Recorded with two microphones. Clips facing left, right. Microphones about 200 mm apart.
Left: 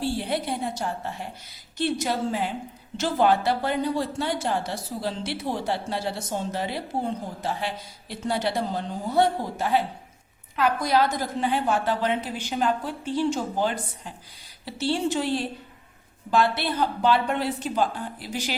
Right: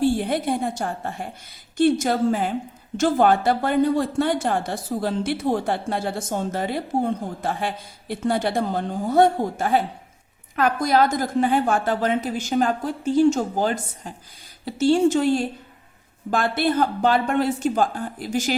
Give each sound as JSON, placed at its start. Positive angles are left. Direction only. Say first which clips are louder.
{"t": 0.0, "sound": "a woman's voice", "louder": "right 6 dB", "side_deg": -50}